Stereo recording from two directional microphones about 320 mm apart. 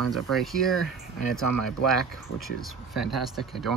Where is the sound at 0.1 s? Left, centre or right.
Centre.